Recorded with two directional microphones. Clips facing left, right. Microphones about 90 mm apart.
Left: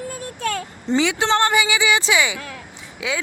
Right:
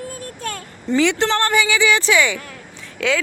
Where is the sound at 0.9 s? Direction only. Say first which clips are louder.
Right 1 dB; 10° left (ahead or behind).